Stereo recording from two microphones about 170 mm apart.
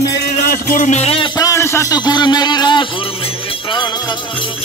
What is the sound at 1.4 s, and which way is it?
A man's voice, 15° left (ahead or behind).